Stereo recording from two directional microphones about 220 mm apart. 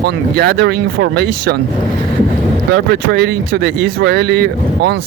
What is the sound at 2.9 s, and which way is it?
Speech, 50° right (ahead or behind).